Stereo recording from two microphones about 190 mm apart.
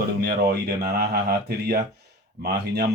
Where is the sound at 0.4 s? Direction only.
55° right (ahead or behind).